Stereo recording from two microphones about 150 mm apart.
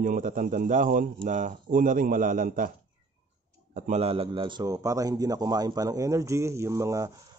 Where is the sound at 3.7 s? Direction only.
60° right (ahead or behind).